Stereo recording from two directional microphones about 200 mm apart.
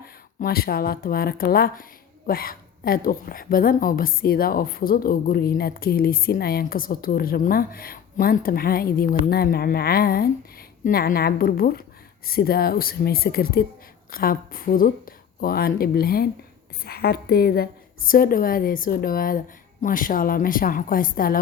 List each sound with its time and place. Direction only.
0.0 s speech: 50° left (ahead or behind)